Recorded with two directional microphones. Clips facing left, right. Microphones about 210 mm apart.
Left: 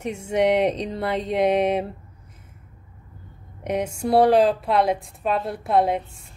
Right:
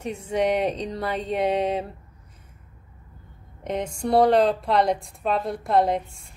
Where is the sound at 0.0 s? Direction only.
25° left (ahead or behind).